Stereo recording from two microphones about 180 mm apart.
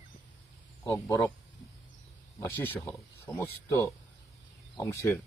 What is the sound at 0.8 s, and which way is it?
Speech, 20° left (ahead or behind).